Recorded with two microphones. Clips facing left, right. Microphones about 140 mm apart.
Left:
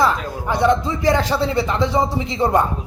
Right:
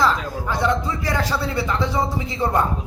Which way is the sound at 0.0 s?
15° left (ahead or behind).